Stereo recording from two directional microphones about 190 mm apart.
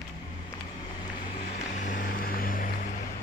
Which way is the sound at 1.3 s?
45° left (ahead or behind).